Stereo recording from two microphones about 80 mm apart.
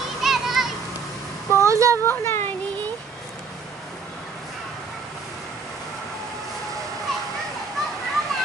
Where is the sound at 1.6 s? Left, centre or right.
Right.